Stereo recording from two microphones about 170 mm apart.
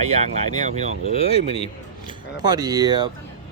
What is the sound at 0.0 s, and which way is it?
Speech, 40° right (ahead or behind).